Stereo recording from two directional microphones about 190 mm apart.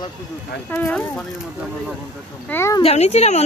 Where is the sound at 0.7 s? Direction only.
5° left (ahead or behind).